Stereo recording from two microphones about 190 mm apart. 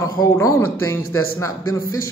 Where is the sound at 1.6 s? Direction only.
90° left.